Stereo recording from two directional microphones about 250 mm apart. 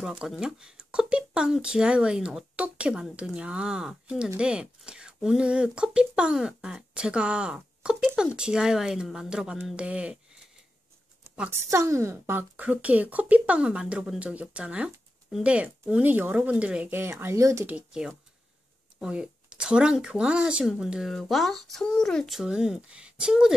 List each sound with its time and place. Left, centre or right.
0.0 s speech: centre